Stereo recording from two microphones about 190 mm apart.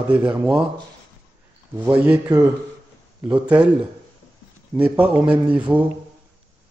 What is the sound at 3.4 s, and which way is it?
Speech, 5° right (ahead or behind).